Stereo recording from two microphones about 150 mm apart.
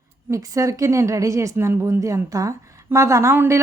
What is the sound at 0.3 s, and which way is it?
Speech, 25° right (ahead or behind).